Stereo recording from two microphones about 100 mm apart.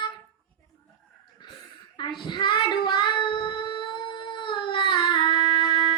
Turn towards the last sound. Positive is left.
turn(degrees=50)  # may be behind; listen again after turning